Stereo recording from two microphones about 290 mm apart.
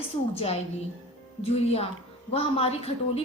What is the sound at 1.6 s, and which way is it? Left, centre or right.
A woman's voice, left.